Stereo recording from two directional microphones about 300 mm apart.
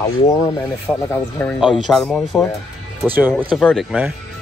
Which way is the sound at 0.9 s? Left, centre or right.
Centre.